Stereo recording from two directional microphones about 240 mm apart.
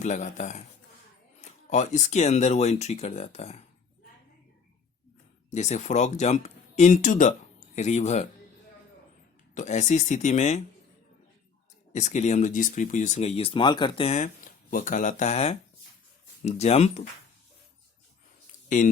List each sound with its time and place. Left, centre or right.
0.0 s speech: left
5.5 s speech: left
9.6 s speech: left
11.9 s speech: left